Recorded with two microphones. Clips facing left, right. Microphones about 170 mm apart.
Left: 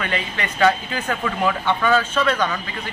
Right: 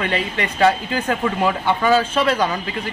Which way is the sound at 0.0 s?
30° right (ahead or behind).